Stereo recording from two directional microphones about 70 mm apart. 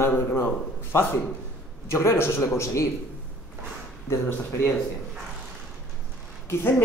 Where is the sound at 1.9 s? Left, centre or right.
Left.